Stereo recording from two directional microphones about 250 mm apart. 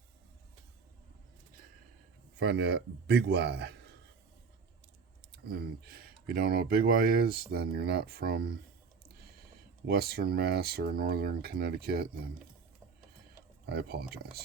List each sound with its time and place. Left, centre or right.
2.4 s speech: right
5.3 s speech: right
9.8 s speech: right
13.7 s speech: right